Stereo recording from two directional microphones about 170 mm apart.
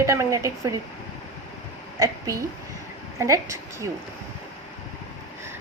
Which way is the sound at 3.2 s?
20° right (ahead or behind).